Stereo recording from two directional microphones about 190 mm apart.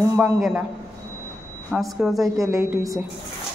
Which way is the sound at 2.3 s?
15° right (ahead or behind).